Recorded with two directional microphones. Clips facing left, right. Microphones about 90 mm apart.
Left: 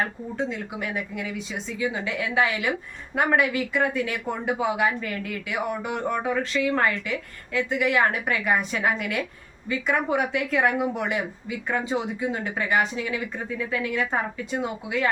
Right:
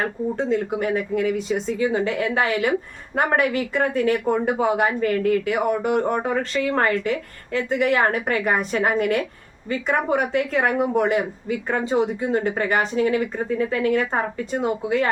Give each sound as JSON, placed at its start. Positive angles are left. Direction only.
{"t": 0.0, "sound": "speech", "side_deg": -40}